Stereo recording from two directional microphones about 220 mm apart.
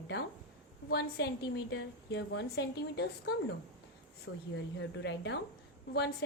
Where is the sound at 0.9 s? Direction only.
50° left (ahead or behind).